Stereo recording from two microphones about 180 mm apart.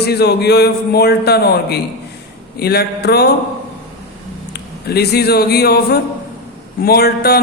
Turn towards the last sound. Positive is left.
turn(degrees=60)  # may be behind; listen again after turning